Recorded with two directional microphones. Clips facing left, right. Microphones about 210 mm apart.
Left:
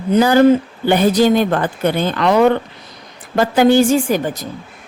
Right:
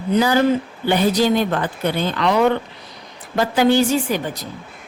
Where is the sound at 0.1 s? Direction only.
45° left (ahead or behind).